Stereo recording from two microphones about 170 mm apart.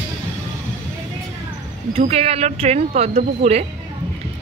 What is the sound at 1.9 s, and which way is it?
Speech, 35° right (ahead or behind).